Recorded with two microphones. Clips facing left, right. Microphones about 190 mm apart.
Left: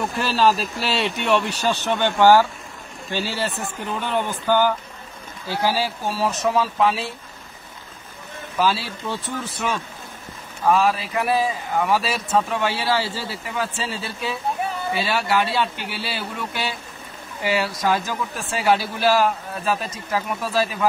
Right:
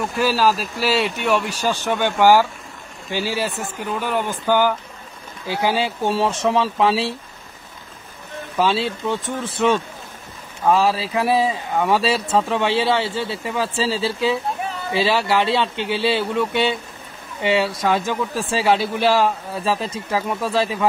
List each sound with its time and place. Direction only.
0.2 s speech: 5° right (ahead or behind); by 7.2 s 30° right (ahead or behind)
8.5 s speech: 25° right (ahead or behind)